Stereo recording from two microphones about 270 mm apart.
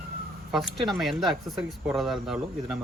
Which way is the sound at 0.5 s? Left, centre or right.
Centre.